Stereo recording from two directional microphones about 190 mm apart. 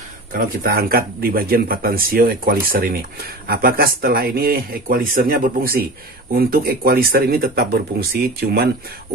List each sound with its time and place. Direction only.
0.3 s speech: 50° right (ahead or behind)